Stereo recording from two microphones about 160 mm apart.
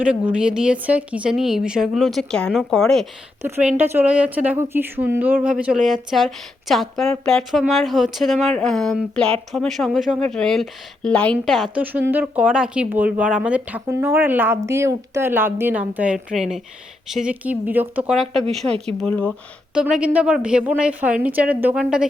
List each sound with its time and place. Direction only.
0.0 s speech: 5° right (ahead or behind)
3.4 s speech: 10° right (ahead or behind)
11.8 s speech: 10° right (ahead or behind)
19.0 s speech: 10° left (ahead or behind)
19.7 s speech: 5° right (ahead or behind)